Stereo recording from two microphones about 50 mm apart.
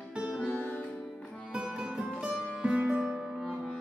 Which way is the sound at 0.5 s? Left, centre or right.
Left.